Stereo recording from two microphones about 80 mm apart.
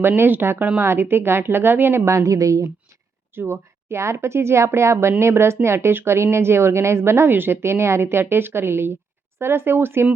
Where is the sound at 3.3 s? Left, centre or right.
Right.